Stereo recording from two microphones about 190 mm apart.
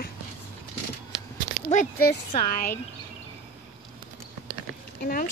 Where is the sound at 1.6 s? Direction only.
90° right.